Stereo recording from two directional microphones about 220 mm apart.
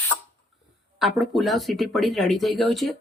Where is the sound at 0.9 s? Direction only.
Centre (ahead or behind).